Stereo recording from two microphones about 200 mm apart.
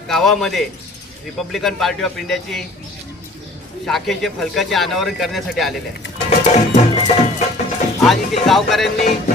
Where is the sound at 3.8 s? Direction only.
Centre (ahead or behind).